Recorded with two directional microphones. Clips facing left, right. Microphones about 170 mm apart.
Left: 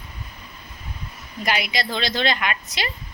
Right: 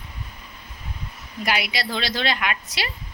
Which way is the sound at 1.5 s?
5° right (ahead or behind).